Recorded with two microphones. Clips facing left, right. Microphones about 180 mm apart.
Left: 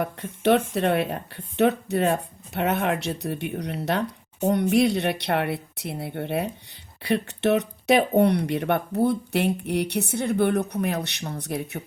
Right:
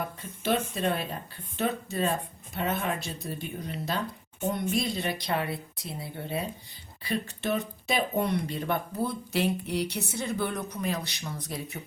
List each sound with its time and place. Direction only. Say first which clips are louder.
0.0 s speech: left 9 dB; 65° left (ahead or behind)